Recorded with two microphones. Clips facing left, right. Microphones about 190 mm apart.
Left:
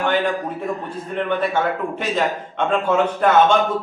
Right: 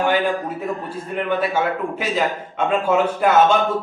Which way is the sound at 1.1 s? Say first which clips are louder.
Even; 5° right (ahead or behind).